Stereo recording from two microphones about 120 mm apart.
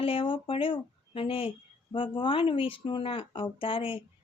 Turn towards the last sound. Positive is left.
turn(degrees=50)  # may be behind; listen again after turning